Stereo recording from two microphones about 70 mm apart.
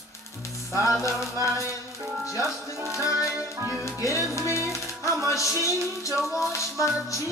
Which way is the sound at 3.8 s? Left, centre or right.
Left.